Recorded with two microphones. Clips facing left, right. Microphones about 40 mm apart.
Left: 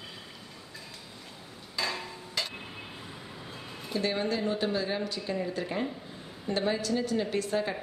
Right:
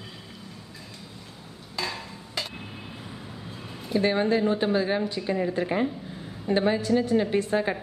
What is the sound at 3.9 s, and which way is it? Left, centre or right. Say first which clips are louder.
Speech: right 7 dB; right.